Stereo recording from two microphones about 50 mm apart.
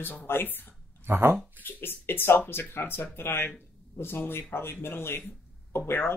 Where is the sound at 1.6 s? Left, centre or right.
Left.